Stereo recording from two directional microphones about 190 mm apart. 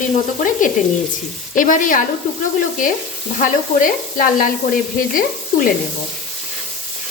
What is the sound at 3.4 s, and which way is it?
Sizzle, 45° left (ahead or behind).